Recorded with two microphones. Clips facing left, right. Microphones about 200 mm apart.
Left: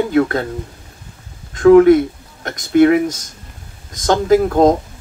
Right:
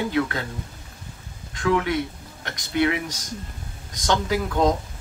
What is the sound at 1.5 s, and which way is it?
Speech, 45° left (ahead or behind).